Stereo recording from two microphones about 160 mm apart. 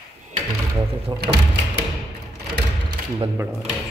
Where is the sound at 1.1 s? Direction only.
20° right (ahead or behind).